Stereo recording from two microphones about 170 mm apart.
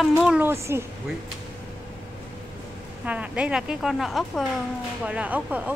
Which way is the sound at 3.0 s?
5° right (ahead or behind).